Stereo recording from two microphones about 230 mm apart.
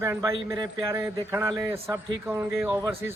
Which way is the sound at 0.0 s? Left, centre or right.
Centre.